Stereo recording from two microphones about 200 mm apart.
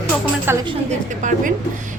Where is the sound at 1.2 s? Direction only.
40° right (ahead or behind).